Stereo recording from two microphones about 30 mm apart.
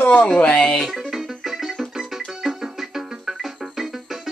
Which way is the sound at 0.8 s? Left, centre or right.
Centre.